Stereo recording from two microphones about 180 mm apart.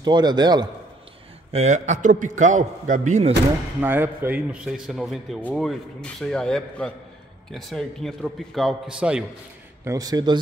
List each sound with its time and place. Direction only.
0.0 s a man's voice: 25° right (ahead or behind)
1.5 s a man's voice: 40° right (ahead or behind)
3.8 s a man's voice: 10° right (ahead or behind)
9.8 s a man's voice: 20° right (ahead or behind)